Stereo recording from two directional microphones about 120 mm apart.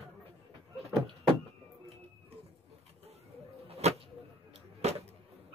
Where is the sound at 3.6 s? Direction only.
60° right (ahead or behind).